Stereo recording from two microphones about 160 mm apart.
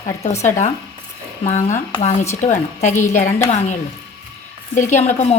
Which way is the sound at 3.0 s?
15° left (ahead or behind).